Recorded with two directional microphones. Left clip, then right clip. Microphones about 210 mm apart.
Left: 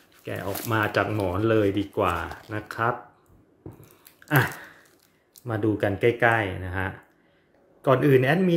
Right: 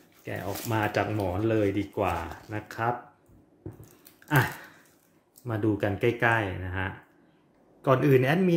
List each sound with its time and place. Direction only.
0.2 s speech: 10° left (ahead or behind)
5.4 s a man's voice: 10° left (ahead or behind)